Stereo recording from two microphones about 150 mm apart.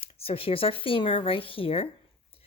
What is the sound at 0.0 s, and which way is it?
A woman's voice, 40° left (ahead or behind).